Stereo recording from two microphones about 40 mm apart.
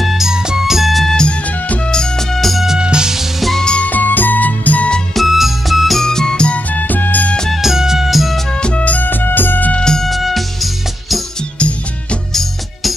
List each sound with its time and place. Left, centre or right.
0.0 s music: centre
1.0 s music: centre
2.8 s music: centre
3.7 s music: left
5.1 s music: centre
6.0 s music: centre
6.5 s music: left
7.6 s music: centre
8.5 s music: left
8.8 s music: left
9.8 s music: centre
10.0 s music: centre
11.5 s music: left
12.3 s music: centre